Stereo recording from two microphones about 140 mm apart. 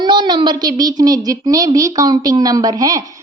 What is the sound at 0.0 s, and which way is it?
A child's voice, 30° right (ahead or behind).